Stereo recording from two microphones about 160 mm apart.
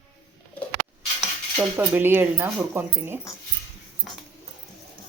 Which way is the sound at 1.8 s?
15° right (ahead or behind).